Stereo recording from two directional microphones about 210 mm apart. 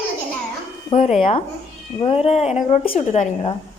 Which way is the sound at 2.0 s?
25° left (ahead or behind).